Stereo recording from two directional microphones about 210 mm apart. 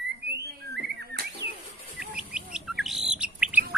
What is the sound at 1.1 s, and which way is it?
Bird, 50° right (ahead or behind).